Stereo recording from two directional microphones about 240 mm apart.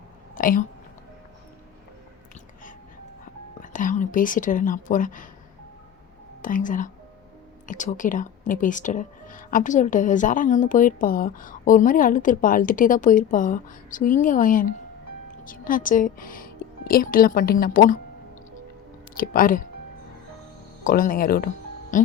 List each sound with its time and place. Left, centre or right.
0.3 s a sound: left
3.6 s speech: left
6.4 s a woman's voice: left
19.1 s speech: left
20.8 s speech: left